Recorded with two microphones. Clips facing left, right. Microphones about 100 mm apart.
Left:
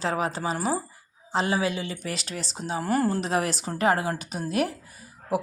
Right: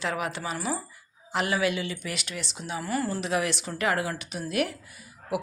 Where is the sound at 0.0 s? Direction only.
35° left (ahead or behind).